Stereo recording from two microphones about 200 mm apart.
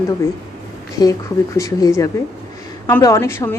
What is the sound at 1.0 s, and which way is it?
Speech, 15° left (ahead or behind).